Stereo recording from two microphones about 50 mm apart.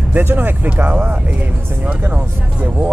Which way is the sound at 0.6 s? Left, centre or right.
Right.